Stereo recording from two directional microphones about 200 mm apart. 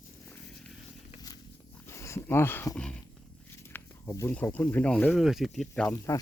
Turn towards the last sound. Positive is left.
turn(degrees=5)  # may be behind; listen again after turning